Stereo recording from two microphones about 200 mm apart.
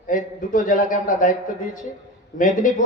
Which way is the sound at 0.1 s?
40° left (ahead or behind).